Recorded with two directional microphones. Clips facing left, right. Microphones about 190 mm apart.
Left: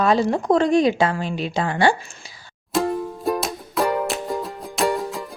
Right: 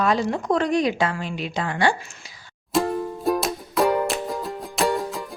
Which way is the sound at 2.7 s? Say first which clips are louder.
Even; centre (ahead or behind).